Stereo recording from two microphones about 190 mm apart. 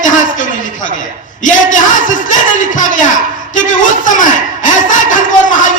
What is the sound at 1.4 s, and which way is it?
Speech, 40° left (ahead or behind).